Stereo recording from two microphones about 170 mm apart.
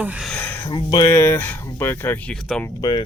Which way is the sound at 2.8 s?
25° left (ahead or behind).